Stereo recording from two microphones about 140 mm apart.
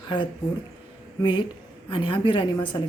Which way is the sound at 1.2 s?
35° left (ahead or behind).